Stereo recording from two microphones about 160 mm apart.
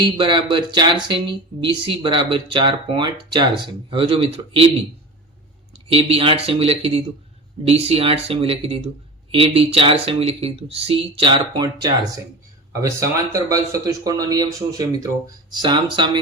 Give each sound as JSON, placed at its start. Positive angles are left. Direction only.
{"t": 0.0, "sound": "speech", "side_deg": -30}
{"t": 5.9, "sound": "speech", "side_deg": -35}